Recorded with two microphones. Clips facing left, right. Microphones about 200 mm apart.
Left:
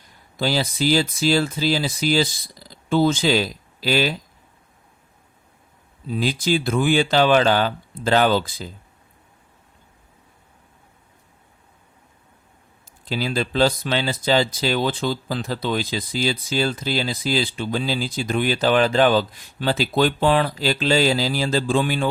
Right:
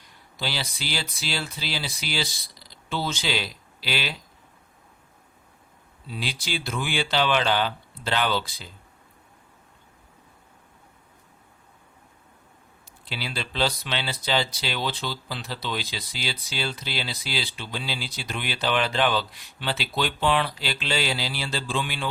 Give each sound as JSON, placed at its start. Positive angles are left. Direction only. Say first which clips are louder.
{"t": 0.3, "sound": "speech", "louder": "left 10 dB", "side_deg": 45}
{"t": 6.1, "sound": "speech", "louder": "left 11 dB", "side_deg": 45}
{"t": 13.1, "sound": "speech", "louder": "left 10 dB", "side_deg": 45}